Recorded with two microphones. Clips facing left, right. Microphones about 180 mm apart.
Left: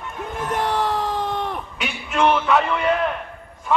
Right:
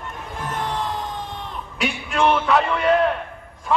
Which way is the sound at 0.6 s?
70° left (ahead or behind).